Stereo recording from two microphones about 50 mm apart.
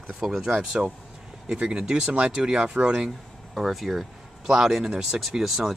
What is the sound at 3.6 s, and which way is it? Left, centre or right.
Speech, centre.